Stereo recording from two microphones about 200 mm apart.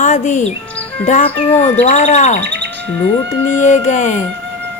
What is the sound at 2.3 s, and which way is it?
Bird, 60° right (ahead or behind).